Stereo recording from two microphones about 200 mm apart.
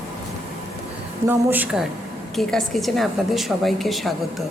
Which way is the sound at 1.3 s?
10° right (ahead or behind).